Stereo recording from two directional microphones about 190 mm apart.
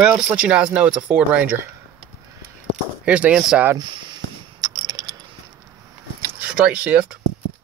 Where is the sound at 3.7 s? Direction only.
20° right (ahead or behind).